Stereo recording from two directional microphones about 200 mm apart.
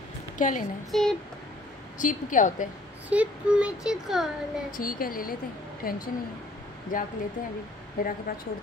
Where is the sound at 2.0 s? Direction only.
40° left (ahead or behind).